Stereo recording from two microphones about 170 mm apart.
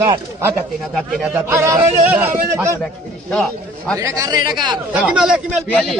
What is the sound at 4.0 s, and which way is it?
Speech, 20° right (ahead or behind).